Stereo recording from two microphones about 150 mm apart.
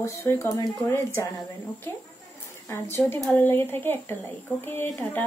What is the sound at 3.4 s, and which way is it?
A woman's voice, 15° left (ahead or behind).